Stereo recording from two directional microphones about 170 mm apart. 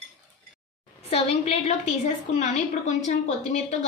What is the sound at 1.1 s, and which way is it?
A woman's voice, 35° left (ahead or behind).